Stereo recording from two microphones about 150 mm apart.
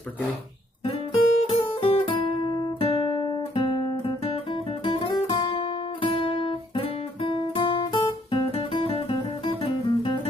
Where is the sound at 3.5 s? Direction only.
35° left (ahead or behind).